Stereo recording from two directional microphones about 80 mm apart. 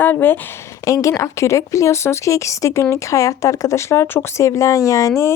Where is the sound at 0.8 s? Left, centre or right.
Left.